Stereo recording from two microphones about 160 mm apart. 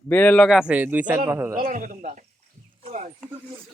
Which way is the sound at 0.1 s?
10° left (ahead or behind).